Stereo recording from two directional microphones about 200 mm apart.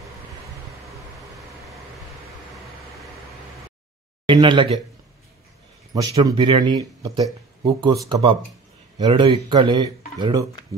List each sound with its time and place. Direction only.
4.3 s speech: 25° right (ahead or behind)
5.9 s speech: 20° right (ahead or behind)